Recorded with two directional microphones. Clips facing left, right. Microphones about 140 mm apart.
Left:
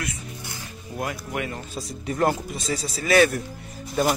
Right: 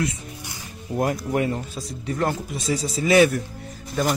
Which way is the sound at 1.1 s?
30° right (ahead or behind).